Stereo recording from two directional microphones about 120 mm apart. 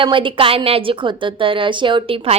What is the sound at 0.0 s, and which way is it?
A woman's voice, 45° right (ahead or behind).